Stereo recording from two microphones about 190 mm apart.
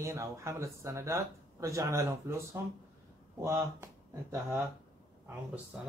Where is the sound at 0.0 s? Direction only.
15° right (ahead or behind).